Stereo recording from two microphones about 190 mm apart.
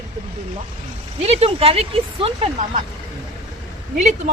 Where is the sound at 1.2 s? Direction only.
35° right (ahead or behind).